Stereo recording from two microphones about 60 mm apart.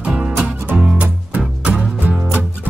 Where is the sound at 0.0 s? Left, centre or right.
Centre.